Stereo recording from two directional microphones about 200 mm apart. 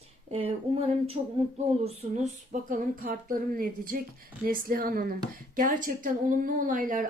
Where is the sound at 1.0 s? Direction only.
30° right (ahead or behind).